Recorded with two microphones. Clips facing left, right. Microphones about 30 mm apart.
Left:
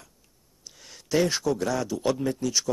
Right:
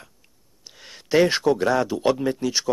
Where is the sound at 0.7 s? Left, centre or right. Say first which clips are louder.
Right 5 dB; right.